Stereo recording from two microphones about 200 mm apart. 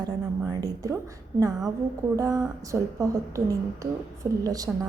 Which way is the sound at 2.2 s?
15° right (ahead or behind).